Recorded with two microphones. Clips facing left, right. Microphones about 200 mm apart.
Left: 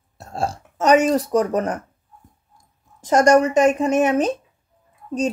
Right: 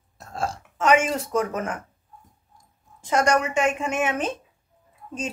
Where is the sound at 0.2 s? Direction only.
30° left (ahead or behind).